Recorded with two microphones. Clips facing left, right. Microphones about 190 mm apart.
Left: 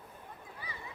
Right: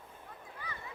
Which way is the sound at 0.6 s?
10° left (ahead or behind).